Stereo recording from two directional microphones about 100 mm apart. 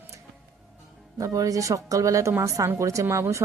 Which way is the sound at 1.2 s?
35° right (ahead or behind).